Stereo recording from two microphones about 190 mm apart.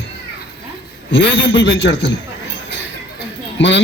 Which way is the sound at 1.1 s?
70° left (ahead or behind).